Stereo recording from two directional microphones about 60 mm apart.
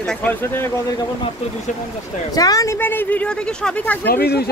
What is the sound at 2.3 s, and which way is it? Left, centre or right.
Speech, left.